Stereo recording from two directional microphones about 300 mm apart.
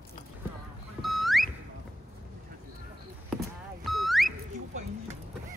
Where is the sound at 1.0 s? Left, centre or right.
Centre.